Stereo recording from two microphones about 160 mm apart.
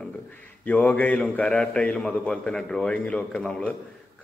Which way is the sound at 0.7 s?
10° left (ahead or behind).